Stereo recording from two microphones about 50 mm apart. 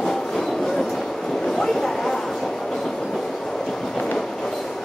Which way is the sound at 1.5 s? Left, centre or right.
Centre.